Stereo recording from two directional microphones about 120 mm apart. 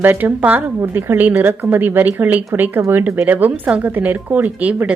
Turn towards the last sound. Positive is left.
turn(degrees=-10)  # may be behind; listen again after turning